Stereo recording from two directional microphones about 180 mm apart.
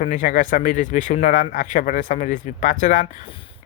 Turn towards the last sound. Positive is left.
turn(degrees=45)  # may be behind; listen again after turning